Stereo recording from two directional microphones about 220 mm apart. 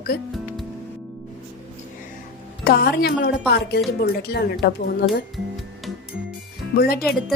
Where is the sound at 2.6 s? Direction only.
45° left (ahead or behind).